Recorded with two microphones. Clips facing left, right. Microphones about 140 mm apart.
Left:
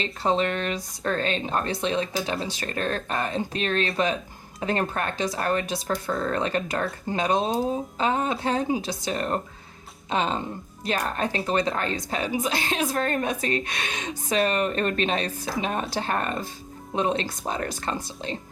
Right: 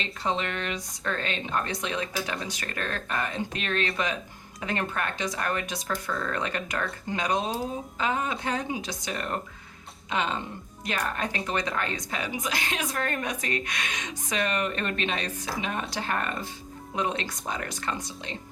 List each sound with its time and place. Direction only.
0.0 s a woman's voice: 35° left (ahead or behind)